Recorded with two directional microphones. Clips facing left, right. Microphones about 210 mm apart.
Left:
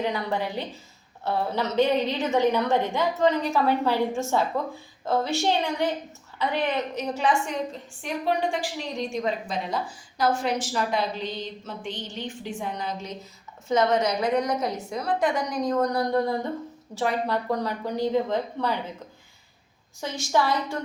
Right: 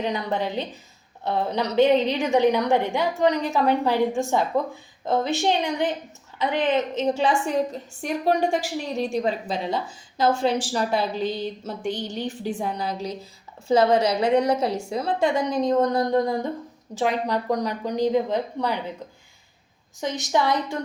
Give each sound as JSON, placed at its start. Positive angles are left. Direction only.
{"t": 0.0, "sound": "a woman's voice", "side_deg": -20}
{"t": 8.0, "sound": "a woman's voice", "side_deg": -45}
{"t": 9.1, "sound": "a woman's voice", "side_deg": -30}
{"t": 20.0, "sound": "a woman's voice", "side_deg": -20}